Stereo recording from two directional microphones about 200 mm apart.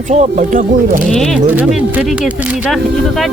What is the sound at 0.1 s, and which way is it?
Speech, 35° right (ahead or behind).